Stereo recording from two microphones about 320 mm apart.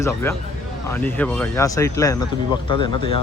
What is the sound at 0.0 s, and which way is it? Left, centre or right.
A man's voice, centre.